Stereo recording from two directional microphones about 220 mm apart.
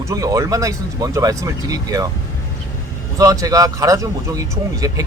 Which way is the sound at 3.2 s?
15° right (ahead or behind).